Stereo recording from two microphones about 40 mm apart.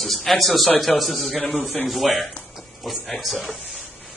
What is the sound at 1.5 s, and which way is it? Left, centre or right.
Speech, left.